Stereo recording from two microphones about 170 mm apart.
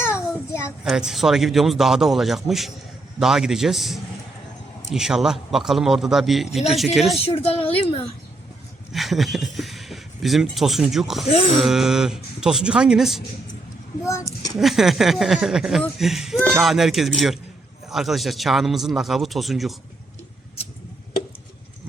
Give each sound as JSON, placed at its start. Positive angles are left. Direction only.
{"t": 0.9, "sound": "a man's voice", "side_deg": -5}
{"t": 7.2, "sound": "a woman's voice", "side_deg": 35}
{"t": 8.9, "sound": "a man's voice", "side_deg": 0}
{"t": 14.0, "sound": "a child's voice", "side_deg": 15}
{"t": 14.5, "sound": "a man's voice", "side_deg": 0}